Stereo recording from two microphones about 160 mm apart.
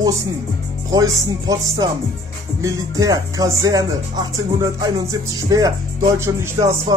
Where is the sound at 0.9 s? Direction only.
20° right (ahead or behind).